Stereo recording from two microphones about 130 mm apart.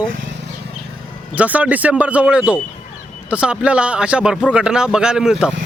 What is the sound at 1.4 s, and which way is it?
A man's voice, 10° right (ahead or behind).